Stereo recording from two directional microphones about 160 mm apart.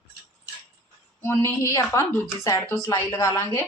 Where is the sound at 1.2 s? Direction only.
15° left (ahead or behind).